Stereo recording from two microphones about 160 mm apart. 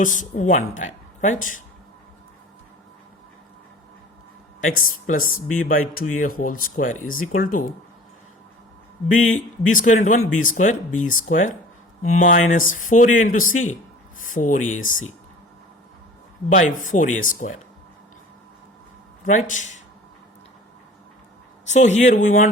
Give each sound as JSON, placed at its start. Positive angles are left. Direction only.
{"t": 0.0, "sound": "speech", "side_deg": 55}
{"t": 4.6, "sound": "speech", "side_deg": 55}
{"t": 9.1, "sound": "speech", "side_deg": 50}
{"t": 16.5, "sound": "speech", "side_deg": 55}
{"t": 19.2, "sound": "speech", "side_deg": 50}
{"t": 21.7, "sound": "speech", "side_deg": 45}